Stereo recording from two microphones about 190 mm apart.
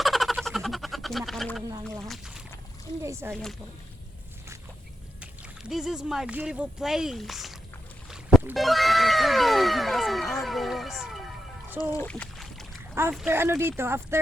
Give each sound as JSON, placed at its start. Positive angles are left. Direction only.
{"t": 0.0, "sound": "fowl", "side_deg": 0}
{"t": 2.0, "sound": "speech", "side_deg": 0}
{"t": 3.0, "sound": "speech", "side_deg": -15}
{"t": 5.2, "sound": "speech", "side_deg": -5}
{"t": 11.8, "sound": "speech", "side_deg": 15}
{"t": 12.0, "sound": "boat", "side_deg": 5}
{"t": 12.9, "sound": "boat", "side_deg": -10}
{"t": 13.1, "sound": "speech", "side_deg": -10}